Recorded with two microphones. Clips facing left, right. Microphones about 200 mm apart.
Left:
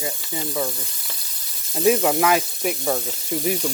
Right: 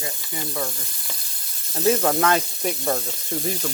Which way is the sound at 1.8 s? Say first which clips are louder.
Left 2 dB; 10° left (ahead or behind).